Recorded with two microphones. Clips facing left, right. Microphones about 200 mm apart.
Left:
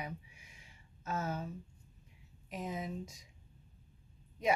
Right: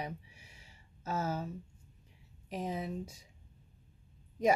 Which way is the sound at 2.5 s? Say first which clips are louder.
Right 3 dB; 30° right (ahead or behind).